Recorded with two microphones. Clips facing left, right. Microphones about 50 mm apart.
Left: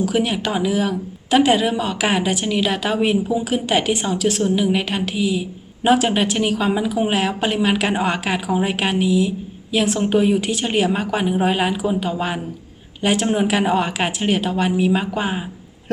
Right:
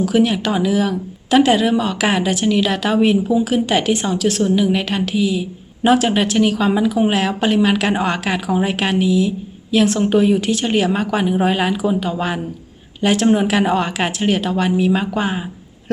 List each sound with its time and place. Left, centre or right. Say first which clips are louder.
0.1 s speech: right 4 dB; centre
4.4 s a woman's voice: right 2 dB; centre